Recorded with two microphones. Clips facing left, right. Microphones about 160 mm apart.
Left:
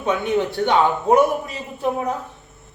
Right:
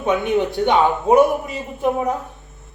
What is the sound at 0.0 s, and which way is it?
A man's voice, 15° right (ahead or behind).